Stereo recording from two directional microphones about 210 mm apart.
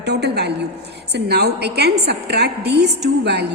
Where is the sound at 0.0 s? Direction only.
55° right (ahead or behind).